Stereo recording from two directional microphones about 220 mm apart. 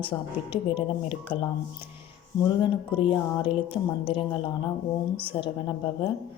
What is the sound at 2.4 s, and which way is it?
Speech, 20° left (ahead or behind).